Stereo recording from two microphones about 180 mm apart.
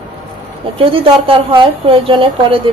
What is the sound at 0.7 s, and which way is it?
A woman's voice, 30° right (ahead or behind).